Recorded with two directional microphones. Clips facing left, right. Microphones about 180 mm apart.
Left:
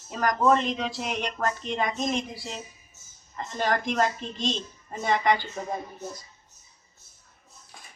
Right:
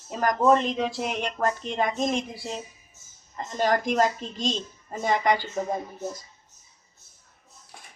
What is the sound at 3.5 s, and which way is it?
Speech, 45° right (ahead or behind).